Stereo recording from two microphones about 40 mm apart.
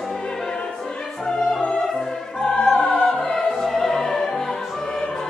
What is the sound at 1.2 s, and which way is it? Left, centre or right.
Music, centre.